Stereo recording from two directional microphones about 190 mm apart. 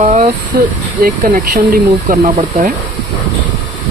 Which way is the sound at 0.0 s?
35° right (ahead or behind).